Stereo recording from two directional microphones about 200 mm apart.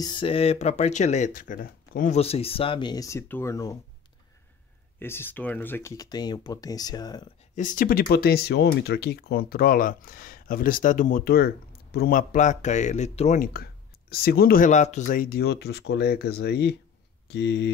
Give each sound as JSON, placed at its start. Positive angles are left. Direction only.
{"t": 0.0, "sound": "speech", "side_deg": 25}
{"t": 2.1, "sound": "speech", "side_deg": 30}
{"t": 4.9, "sound": "speech", "side_deg": 10}
{"t": 7.5, "sound": "speech", "side_deg": 40}
{"t": 13.5, "sound": "speech", "side_deg": 50}